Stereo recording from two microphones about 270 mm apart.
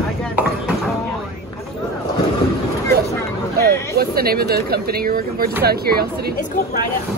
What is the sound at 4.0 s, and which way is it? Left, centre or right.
Speech, right.